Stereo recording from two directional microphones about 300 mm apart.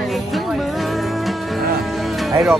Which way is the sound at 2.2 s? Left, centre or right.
Centre.